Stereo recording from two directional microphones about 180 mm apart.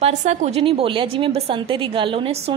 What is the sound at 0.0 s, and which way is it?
A woman's voice, 40° right (ahead or behind).